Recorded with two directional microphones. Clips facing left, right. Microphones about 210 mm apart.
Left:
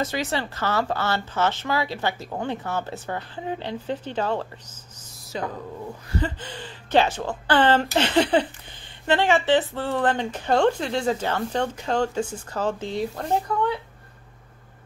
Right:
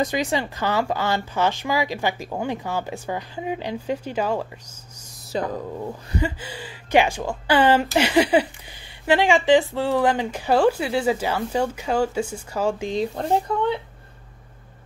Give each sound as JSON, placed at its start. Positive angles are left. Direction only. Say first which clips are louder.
{"t": 0.0, "sound": "speech", "louder": "right 3 dB", "side_deg": -15}
{"t": 5.3, "sound": "speech", "louder": "right 4 dB", "side_deg": -35}
{"t": 6.1, "sound": "speech", "louder": "right 1 dB", "side_deg": -10}